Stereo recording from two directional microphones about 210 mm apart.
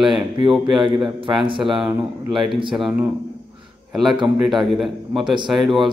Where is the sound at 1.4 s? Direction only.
25° right (ahead or behind).